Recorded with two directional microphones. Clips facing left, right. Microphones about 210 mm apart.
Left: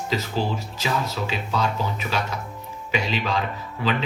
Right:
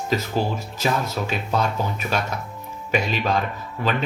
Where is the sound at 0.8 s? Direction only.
50° right (ahead or behind).